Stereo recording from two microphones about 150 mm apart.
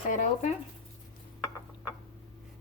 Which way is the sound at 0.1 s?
60° left (ahead or behind).